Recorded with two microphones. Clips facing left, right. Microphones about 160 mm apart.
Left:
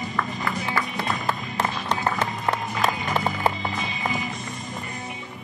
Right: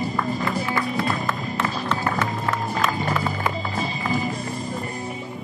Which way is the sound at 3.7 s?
35° right (ahead or behind).